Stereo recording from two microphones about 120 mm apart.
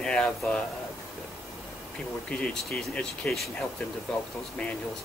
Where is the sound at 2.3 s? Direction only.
5° left (ahead or behind).